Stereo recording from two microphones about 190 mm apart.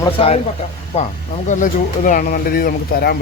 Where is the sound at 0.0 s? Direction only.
30° left (ahead or behind).